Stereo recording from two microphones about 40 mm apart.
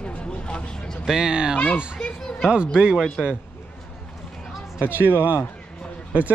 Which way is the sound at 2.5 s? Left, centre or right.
Right.